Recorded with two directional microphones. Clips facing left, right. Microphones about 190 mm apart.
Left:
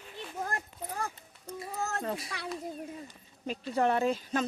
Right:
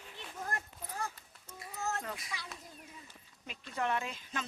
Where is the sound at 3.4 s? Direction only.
35° left (ahead or behind).